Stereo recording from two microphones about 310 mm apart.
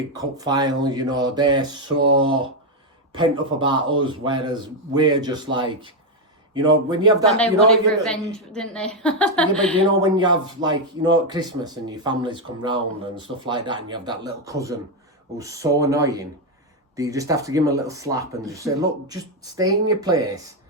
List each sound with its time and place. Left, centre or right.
0.1 s speech: centre
3.6 s speech: centre
7.3 s a woman's voice: centre
10.0 s speech: centre